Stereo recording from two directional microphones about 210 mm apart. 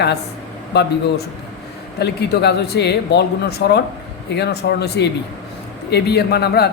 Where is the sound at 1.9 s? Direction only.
50° left (ahead or behind).